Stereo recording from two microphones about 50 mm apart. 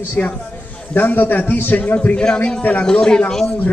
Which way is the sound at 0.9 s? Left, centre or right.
Left.